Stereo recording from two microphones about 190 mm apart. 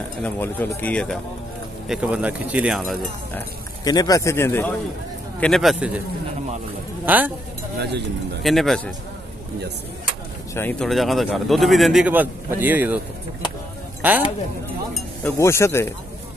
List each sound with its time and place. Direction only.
0.2 s speech: 10° left (ahead or behind)
3.8 s speech: 20° left (ahead or behind)
5.4 s speech: centre (ahead or behind)
7.1 s speech: 10° right (ahead or behind)
7.8 s speech: 60° right (ahead or behind)
8.4 s speech: centre (ahead or behind)
10.5 s speech: 10° left (ahead or behind); by 13.0 s 10° right (ahead or behind)
14.0 s speech: 10° right (ahead or behind)
15.3 s speech: 15° left (ahead or behind)